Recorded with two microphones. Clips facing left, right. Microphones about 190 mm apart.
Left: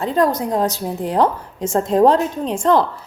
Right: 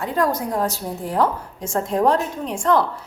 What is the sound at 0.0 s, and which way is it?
A woman's voice, 25° left (ahead or behind).